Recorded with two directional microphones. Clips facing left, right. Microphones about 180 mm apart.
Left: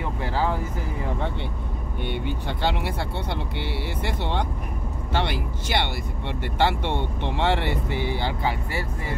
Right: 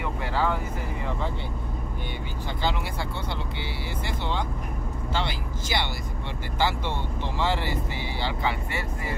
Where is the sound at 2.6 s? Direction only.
60° left (ahead or behind).